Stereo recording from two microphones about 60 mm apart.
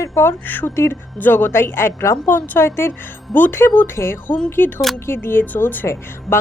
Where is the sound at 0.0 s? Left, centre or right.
Left.